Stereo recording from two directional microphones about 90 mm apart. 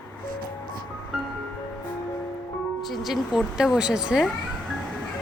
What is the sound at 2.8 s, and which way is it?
Speech, centre (ahead or behind).